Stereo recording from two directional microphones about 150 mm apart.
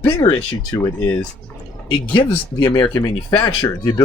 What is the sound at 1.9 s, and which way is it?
Speech, 35° left (ahead or behind).